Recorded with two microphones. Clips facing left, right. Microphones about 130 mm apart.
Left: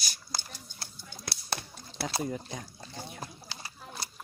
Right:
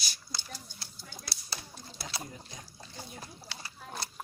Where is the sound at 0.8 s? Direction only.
60° left (ahead or behind).